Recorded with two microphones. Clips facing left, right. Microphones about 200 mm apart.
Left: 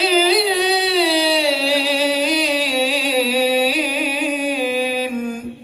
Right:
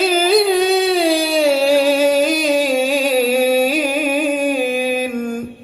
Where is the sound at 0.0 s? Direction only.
45° right (ahead or behind).